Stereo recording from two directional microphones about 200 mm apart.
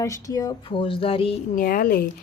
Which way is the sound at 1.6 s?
45° left (ahead or behind).